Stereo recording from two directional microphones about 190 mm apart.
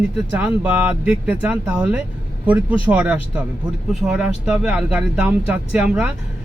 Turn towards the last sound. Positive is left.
turn(degrees=-5)  # may be behind; listen again after turning